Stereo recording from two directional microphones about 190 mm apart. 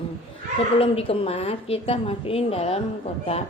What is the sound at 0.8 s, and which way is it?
A woman's voice, 30° left (ahead or behind).